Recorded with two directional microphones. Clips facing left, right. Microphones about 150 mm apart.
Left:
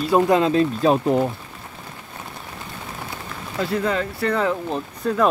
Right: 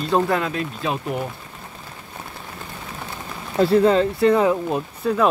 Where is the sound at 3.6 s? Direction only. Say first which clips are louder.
Right 7 dB; 30° right (ahead or behind); by 5.3 s centre (ahead or behind).